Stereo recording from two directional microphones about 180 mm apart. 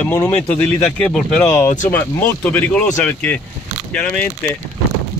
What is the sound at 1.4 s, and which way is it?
Speech, 15° left (ahead or behind).